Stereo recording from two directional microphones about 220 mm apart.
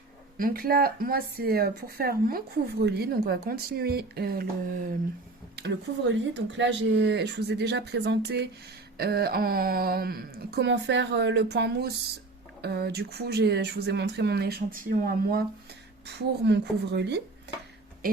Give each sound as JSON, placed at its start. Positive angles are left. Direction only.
{"t": 0.3, "sound": "speech", "side_deg": -40}
{"t": 5.5, "sound": "speech", "side_deg": -50}